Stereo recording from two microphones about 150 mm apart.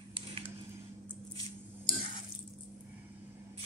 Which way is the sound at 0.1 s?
40° right (ahead or behind).